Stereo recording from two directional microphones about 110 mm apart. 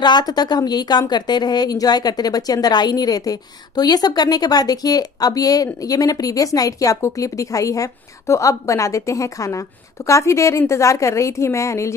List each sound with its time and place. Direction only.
0.0 s a woman's voice: 40° left (ahead or behind)